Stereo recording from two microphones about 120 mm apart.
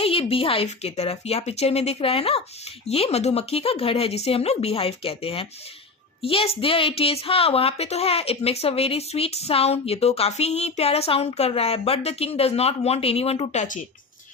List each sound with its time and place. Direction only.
0.0 s a woman's voice: 55° left (ahead or behind); by 13.7 s 75° left (ahead or behind)